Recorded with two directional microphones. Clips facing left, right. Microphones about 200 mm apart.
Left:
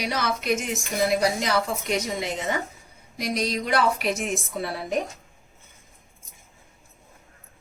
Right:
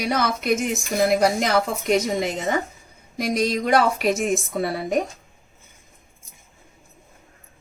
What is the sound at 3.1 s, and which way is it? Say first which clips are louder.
A woman's voice: right 4 dB; 50° right (ahead or behind).